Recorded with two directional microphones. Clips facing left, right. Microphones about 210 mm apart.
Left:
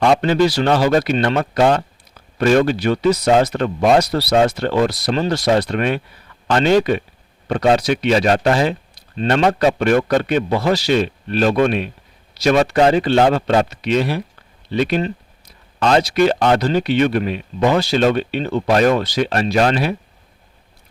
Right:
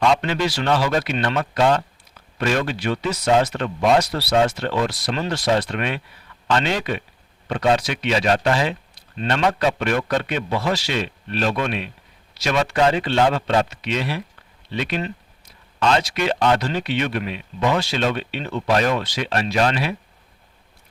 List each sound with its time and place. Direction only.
0.2 s a man's voice: 40° left (ahead or behind)